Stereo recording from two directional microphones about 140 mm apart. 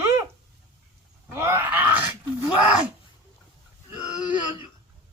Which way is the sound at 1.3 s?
20° right (ahead or behind).